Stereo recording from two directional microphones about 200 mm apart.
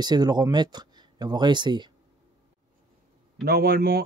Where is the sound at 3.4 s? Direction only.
50° right (ahead or behind).